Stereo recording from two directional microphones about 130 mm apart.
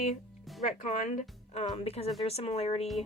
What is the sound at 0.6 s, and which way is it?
Speech, 60° left (ahead or behind).